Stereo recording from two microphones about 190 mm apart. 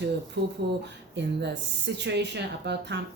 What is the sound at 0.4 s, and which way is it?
A woman's voice, 60° right (ahead or behind).